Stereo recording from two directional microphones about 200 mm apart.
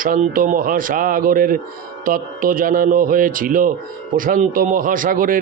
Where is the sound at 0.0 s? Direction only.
45° right (ahead or behind).